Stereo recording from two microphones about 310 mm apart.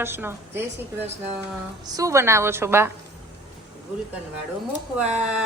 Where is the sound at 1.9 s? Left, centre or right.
Centre.